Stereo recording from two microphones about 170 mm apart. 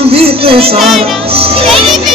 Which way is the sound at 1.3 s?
35° right (ahead or behind).